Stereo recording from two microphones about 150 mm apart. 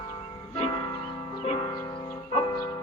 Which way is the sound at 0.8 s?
25° left (ahead or behind).